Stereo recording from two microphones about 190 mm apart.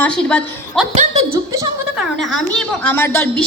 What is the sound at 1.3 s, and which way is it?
Speech, 20° right (ahead or behind).